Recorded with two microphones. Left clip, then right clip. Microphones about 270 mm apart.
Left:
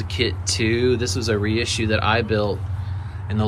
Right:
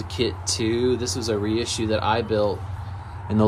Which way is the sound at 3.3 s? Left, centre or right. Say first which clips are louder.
Right 5 dB; centre.